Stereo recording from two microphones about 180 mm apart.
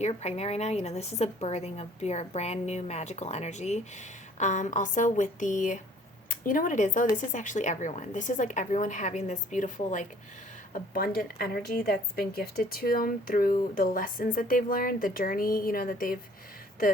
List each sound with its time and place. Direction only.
0.0 s a woman's voice: 35° left (ahead or behind)
10.7 s a woman's voice: 55° left (ahead or behind)